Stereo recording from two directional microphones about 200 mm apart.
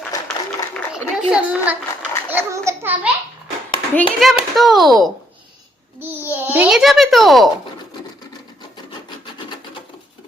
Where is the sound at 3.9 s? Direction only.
5° left (ahead or behind).